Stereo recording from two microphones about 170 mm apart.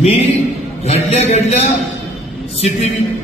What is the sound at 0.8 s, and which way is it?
Speech, 35° left (ahead or behind).